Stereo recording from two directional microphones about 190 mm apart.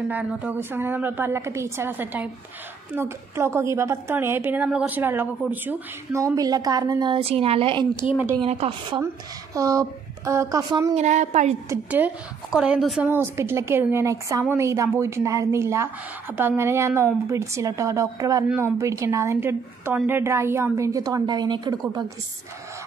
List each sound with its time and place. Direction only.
0.1 s a woman's voice: 5° right (ahead or behind)
11.0 s a woman's voice: 40° right (ahead or behind)
11.7 s a woman's voice: 10° right (ahead or behind)